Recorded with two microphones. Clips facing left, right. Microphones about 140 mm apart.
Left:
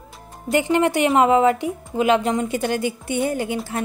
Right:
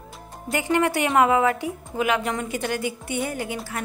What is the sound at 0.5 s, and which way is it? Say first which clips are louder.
A woman's voice: left 4 dB; 25° left (ahead or behind).